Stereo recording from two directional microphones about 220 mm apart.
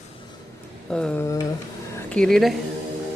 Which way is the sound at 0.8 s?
5° left (ahead or behind).